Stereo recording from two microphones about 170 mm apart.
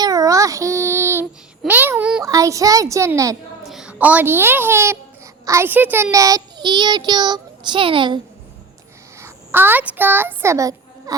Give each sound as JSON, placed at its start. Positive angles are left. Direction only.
{"t": 0.0, "sound": "child singing", "side_deg": -20}
{"t": 2.2, "sound": "a child's voice", "side_deg": -20}
{"t": 3.7, "sound": "a child's voice", "side_deg": -5}
{"t": 9.1, "sound": "speech", "side_deg": -15}